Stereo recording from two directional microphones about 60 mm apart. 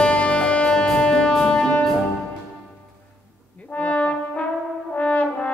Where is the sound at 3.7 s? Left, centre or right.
Left.